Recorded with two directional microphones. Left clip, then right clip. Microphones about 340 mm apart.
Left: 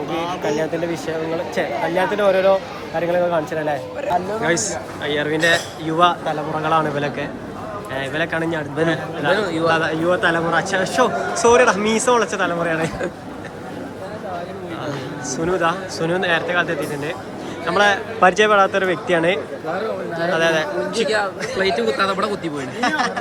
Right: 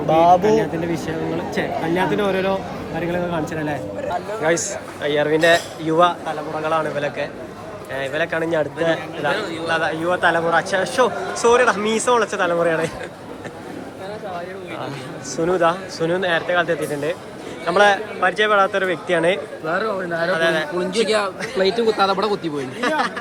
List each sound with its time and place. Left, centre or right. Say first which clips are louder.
0.4 s a man's voice: right 3 dB; centre
9.4 s a man's voice: left 5 dB; centre
9.7 s a man's voice: left 2 dB; centre
15.4 s a man's voice: right 2 dB; centre
21.6 s speech: right 1 dB; centre
22.8 s a man's voice: left 1 dB; centre